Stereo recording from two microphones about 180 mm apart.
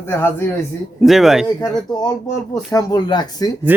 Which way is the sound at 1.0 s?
Centre (ahead or behind).